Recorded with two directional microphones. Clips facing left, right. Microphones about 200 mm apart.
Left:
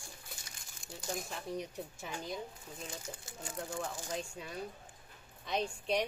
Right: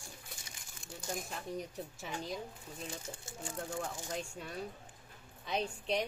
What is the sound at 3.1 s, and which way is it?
Speech, 25° right (ahead or behind).